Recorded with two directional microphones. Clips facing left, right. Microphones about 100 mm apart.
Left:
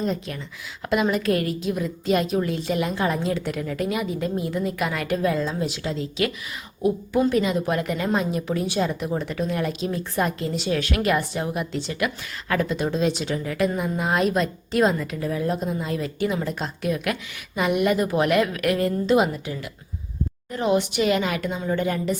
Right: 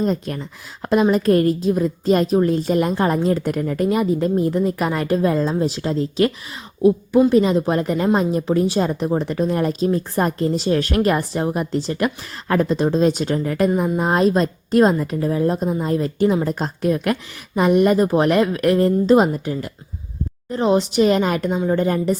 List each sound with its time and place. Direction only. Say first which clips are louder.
0.0 s a woman's voice: right 5 dB; 40° right (ahead or behind)
7.3 s a woman's voice: right 6 dB; 30° right (ahead or behind)
20.5 s a woman's voice: right 4 dB; 30° right (ahead or behind)